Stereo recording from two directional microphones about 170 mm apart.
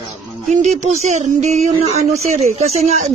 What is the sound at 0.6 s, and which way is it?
Speech, 45° right (ahead or behind).